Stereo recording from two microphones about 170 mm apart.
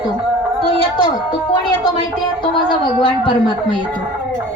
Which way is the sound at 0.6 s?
30° left (ahead or behind).